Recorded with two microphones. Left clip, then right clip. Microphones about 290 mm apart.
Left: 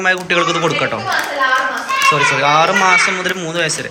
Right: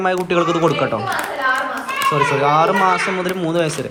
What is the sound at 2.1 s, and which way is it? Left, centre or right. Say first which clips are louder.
A man's voice: left 2 dB; centre.